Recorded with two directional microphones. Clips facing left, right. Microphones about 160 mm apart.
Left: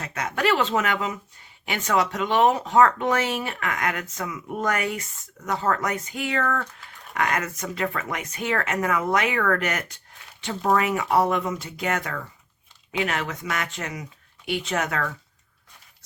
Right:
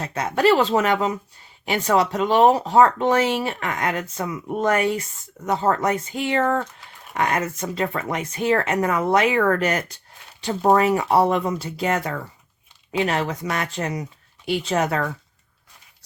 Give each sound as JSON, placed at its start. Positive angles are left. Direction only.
{"t": 0.0, "sound": "speech", "side_deg": -30}